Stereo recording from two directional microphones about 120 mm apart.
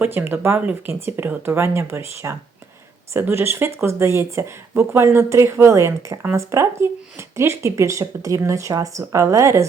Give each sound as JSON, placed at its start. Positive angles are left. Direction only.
{"t": 0.0, "sound": "speech", "side_deg": -15}